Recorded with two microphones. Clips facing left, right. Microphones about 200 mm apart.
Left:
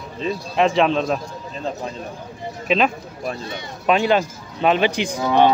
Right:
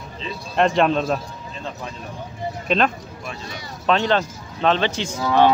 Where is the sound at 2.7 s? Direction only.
5° left (ahead or behind).